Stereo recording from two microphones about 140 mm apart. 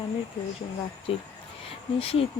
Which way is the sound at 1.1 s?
40° left (ahead or behind).